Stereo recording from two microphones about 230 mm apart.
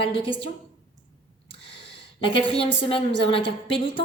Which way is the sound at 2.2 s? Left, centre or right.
Left.